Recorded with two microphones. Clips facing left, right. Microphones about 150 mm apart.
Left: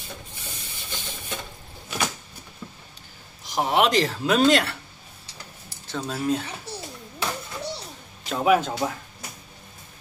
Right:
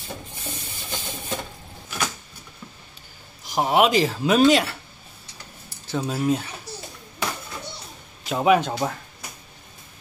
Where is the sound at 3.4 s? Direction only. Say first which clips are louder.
Right 2 dB; centre (ahead or behind).